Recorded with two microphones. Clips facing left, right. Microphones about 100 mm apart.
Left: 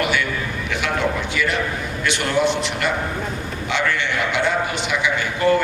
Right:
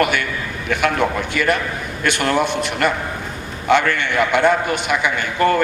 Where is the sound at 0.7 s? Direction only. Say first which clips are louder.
Right 4 dB; 50° right (ahead or behind).